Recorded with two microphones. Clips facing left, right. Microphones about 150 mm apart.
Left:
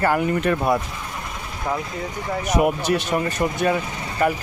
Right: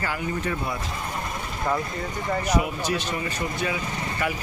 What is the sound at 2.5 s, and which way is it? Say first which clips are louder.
Speech: left 6 dB; 55° left (ahead or behind).